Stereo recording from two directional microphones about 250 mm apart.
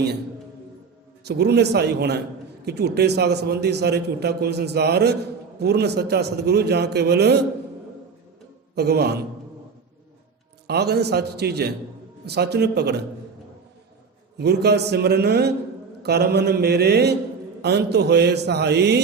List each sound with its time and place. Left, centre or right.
1.2 s a man's voice: right
8.7 s a man's voice: right
10.7 s a man's voice: right
14.3 s a man's voice: right